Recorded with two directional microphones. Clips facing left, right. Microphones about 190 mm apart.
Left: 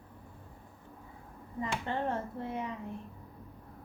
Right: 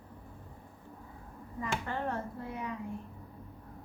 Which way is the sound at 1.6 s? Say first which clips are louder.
Left 1 dB; 25° left (ahead or behind).